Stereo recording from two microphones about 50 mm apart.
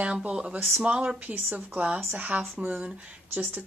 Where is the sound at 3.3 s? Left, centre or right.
Right.